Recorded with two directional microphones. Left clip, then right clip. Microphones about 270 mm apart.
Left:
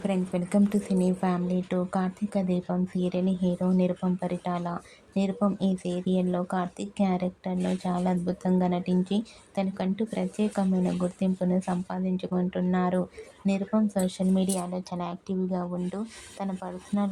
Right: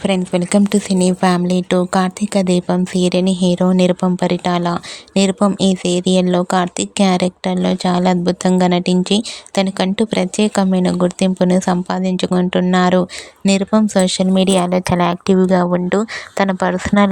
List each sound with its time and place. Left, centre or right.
0.0 s speech: right